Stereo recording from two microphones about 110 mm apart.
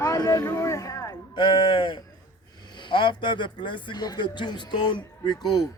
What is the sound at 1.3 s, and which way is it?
A man's voice, 50° left (ahead or behind).